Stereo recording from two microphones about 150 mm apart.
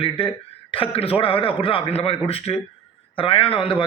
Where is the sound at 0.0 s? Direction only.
35° left (ahead or behind).